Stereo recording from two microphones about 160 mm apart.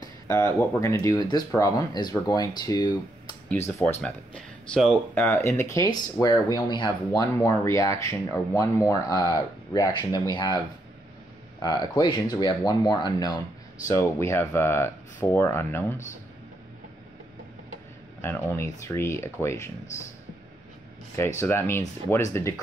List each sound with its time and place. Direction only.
0.0 s speech: 15° left (ahead or behind)
4.0 s speech: 5° left (ahead or behind); by 10.6 s 25° left (ahead or behind)
11.6 s speech: 25° left (ahead or behind)
18.2 s speech: 15° left (ahead or behind)
21.4 s speech: 15° left (ahead or behind)